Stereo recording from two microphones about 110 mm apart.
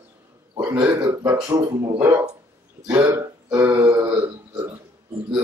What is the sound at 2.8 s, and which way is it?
Speech, 20° right (ahead or behind).